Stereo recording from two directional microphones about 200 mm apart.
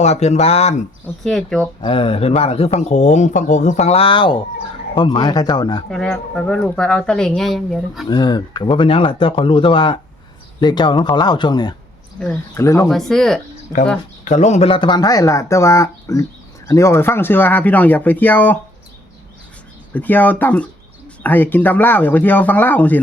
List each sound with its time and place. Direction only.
0.0 s speech: 35° left (ahead or behind)
1.0 s speech: 5° left (ahead or behind)
1.8 s speech: 25° left (ahead or behind)
5.9 s speech: 5° left (ahead or behind)
8.0 s speech: 20° left (ahead or behind)
12.2 s speech: 10° left (ahead or behind)
12.9 s speech: centre (ahead or behind)
14.3 s speech: 35° left (ahead or behind); by 18.5 s 10° left (ahead or behind)
19.9 s speech: 10° left (ahead or behind)